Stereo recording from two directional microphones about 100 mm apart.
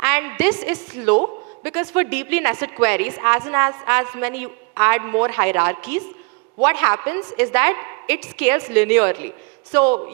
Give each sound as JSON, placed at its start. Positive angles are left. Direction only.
{"t": 0.0, "sound": "a woman's voice", "side_deg": -20}